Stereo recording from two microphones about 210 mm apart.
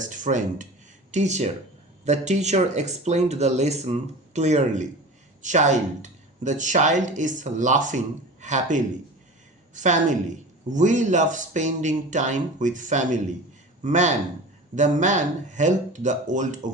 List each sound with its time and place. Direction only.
0.0 s speech: 35° right (ahead or behind)